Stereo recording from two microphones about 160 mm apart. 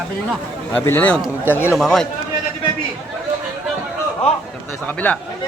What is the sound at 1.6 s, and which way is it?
Speech, 5° right (ahead or behind).